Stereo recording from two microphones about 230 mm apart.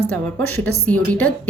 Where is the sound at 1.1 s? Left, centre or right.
Centre.